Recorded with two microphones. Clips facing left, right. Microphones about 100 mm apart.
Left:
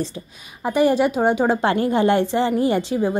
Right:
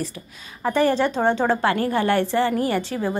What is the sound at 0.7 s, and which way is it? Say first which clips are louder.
A woman's voice: left 2 dB; 15° left (ahead or behind).